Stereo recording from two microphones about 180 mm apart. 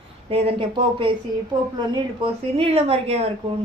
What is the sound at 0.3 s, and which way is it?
A woman's voice, 30° right (ahead or behind).